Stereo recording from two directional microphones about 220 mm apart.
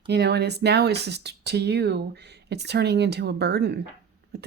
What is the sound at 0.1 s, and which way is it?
Speech, 50° right (ahead or behind).